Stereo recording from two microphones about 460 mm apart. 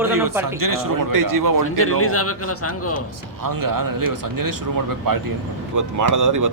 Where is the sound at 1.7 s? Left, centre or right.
Left.